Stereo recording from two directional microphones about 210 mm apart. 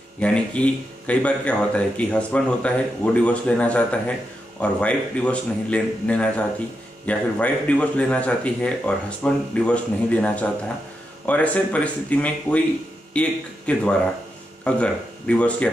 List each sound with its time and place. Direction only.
0.2 s speech: 5° left (ahead or behind)